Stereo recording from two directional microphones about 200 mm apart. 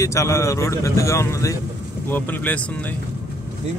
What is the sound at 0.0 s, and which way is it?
Speech, 15° left (ahead or behind).